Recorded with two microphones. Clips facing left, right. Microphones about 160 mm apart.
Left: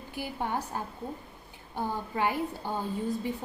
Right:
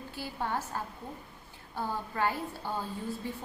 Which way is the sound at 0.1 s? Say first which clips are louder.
Left 2 dB; 15° left (ahead or behind).